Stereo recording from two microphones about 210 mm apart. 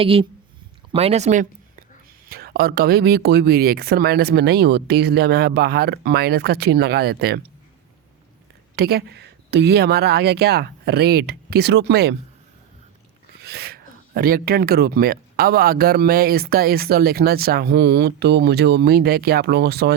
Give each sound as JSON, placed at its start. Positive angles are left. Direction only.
{"t": 0.0, "sound": "speech", "side_deg": -25}
{"t": 2.2, "sound": "speech", "side_deg": -45}
{"t": 8.7, "sound": "speech", "side_deg": -50}
{"t": 13.4, "sound": "speech", "side_deg": -50}